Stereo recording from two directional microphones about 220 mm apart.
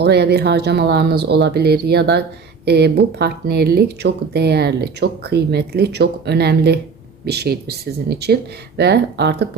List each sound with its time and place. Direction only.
0.0 s speech: 50° right (ahead or behind)